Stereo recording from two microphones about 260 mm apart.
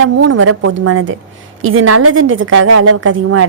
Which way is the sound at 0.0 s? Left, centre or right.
Right.